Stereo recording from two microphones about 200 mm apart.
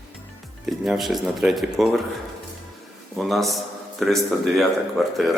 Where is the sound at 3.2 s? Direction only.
Centre (ahead or behind).